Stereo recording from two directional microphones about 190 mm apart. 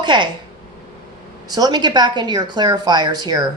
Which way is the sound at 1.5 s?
20° right (ahead or behind).